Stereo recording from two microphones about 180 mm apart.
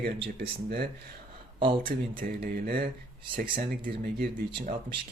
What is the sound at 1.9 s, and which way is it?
Speech, 50° right (ahead or behind).